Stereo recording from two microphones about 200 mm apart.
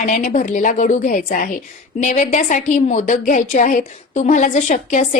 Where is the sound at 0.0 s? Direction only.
40° left (ahead or behind).